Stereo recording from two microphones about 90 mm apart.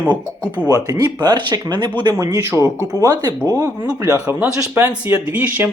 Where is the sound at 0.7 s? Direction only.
45° right (ahead or behind).